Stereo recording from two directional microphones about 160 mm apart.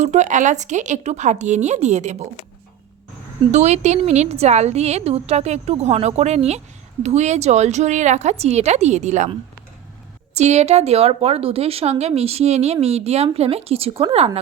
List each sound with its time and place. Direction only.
0.0 s a woman's voice: 45° right (ahead or behind)
3.5 s a woman's voice: 45° right (ahead or behind)
10.3 s a woman's voice: 45° right (ahead or behind)